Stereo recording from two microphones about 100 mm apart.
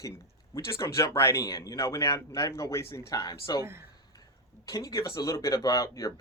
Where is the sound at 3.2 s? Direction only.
40° left (ahead or behind).